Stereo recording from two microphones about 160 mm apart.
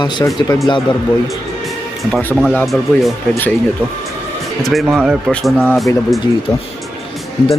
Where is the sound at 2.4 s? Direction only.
Centre (ahead or behind).